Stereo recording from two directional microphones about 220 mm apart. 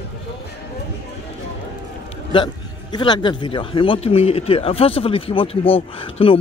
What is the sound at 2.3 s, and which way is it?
A man's voice, 20° left (ahead or behind).